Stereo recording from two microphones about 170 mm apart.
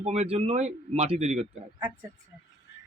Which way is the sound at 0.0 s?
40° right (ahead or behind).